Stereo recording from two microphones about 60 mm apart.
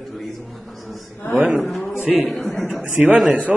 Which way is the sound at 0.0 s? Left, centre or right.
Centre.